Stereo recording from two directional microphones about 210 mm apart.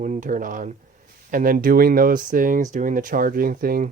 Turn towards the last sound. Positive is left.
turn(degrees=-40)  # may be behind; listen again after turning